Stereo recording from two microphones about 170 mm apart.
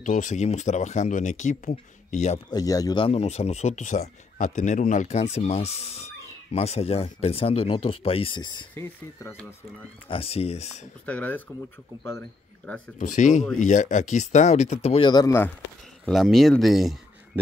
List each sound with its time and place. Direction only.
0.0 s speech: 50° left (ahead or behind)
2.5 s speech: 20° left (ahead or behind)
8.7 s speech: 15° left (ahead or behind)
10.0 s speech: 35° left (ahead or behind)
11.1 s a man's voice: 10° left (ahead or behind)
13.0 s speech: 45° left (ahead or behind); by 15.5 s 15° left (ahead or behind)
16.1 s speech: centre (ahead or behind)